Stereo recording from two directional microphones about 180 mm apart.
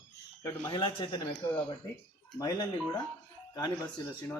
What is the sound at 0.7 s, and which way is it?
A man's voice, 25° left (ahead or behind).